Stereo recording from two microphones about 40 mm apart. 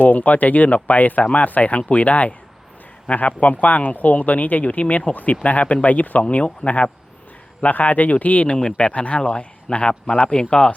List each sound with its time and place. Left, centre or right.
0.0 s speech: left
8.5 s speech: left